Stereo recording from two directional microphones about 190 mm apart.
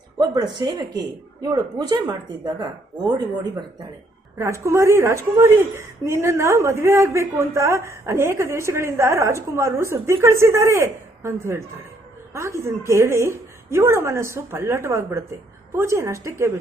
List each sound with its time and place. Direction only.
0.2 s a woman's voice: 20° right (ahead or behind)